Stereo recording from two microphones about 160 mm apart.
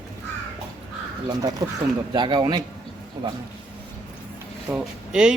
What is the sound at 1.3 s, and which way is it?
Speech, 25° right (ahead or behind).